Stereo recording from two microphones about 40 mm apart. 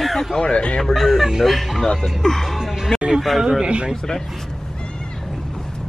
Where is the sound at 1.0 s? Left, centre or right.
Centre.